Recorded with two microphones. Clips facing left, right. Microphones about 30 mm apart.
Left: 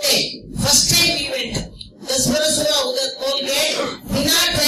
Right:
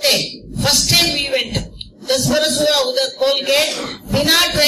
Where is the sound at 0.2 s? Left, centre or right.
Centre.